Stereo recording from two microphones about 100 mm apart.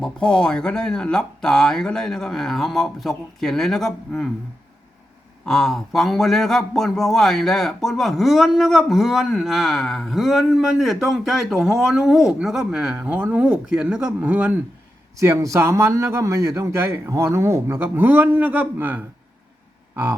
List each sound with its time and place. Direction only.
0.0 s a man's voice: 10° left (ahead or behind)
5.5 s a man's voice: 5° left (ahead or behind); by 14.5 s 15° right (ahead or behind)
15.2 s a man's voice: 30° right (ahead or behind)